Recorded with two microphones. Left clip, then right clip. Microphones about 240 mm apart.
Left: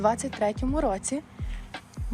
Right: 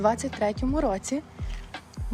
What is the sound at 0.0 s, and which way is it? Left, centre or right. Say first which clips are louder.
Speech: even; centre.